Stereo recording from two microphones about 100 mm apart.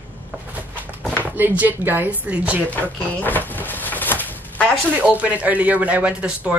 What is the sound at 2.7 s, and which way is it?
Cupboard open or close, 15° left (ahead or behind).